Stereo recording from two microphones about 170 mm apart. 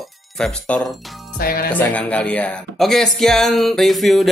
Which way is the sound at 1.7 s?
10° left (ahead or behind).